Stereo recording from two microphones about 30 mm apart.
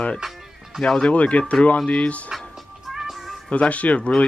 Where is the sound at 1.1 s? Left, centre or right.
Left.